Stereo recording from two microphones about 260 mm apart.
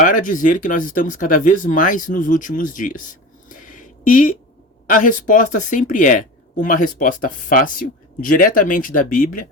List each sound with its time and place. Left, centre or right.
0.0 s speech: left